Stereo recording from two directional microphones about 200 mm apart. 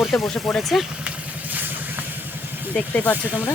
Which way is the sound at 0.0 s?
Centre (ahead or behind).